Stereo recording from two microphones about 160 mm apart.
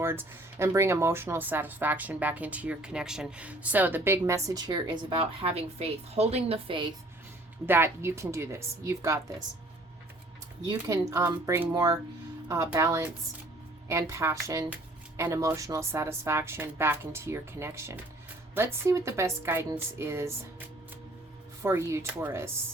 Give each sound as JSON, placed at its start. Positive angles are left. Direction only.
{"t": 0.0, "sound": "speech", "side_deg": -15}
{"t": 7.7, "sound": "speech", "side_deg": -15}
{"t": 10.7, "sound": "speech", "side_deg": -25}